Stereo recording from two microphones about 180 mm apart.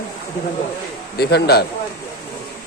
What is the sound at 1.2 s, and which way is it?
Speech, 65° left (ahead or behind).